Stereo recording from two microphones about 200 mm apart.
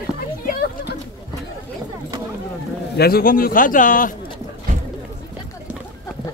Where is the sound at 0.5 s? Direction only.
45° left (ahead or behind).